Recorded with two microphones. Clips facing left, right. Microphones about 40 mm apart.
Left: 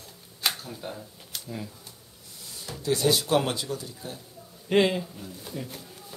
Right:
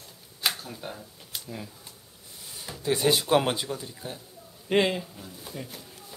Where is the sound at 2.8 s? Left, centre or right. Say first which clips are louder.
Even; right.